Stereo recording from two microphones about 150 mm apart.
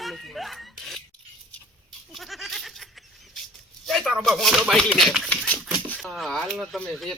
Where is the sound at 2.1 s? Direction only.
Centre (ahead or behind).